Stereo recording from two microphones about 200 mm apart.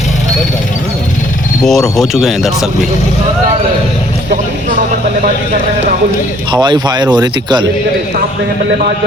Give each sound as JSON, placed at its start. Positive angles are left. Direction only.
{"t": 1.6, "sound": "speech", "side_deg": 0}
{"t": 6.5, "sound": "speech", "side_deg": -20}